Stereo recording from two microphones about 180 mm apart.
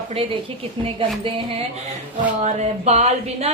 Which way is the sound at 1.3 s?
30° right (ahead or behind).